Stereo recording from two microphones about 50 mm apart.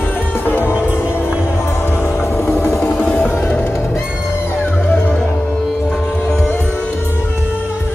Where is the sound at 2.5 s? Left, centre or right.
Left.